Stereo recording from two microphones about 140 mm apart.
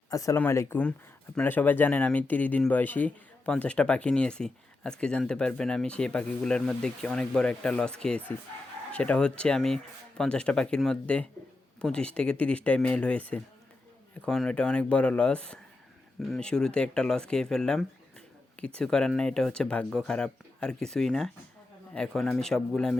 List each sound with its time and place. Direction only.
0.1 s speech: 20° left (ahead or behind); by 23.0 s 5° left (ahead or behind)